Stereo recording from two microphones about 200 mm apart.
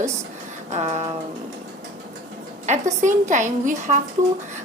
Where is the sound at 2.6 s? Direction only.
35° right (ahead or behind).